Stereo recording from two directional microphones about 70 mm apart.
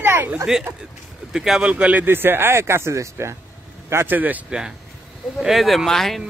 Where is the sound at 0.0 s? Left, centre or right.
Right.